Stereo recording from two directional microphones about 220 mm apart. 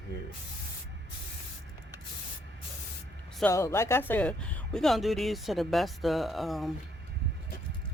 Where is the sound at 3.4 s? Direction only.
10° left (ahead or behind).